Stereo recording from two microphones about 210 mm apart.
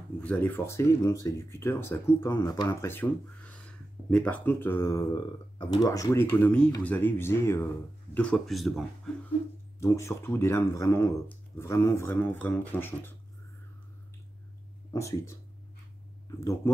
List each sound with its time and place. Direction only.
0.2 s speech: 10° left (ahead or behind)
9.8 s speech: 15° left (ahead or behind)
14.9 s speech: 15° left (ahead or behind)